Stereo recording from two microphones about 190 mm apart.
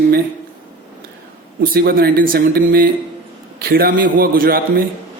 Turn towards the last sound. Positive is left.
turn(degrees=-50)  # may be behind; listen again after turning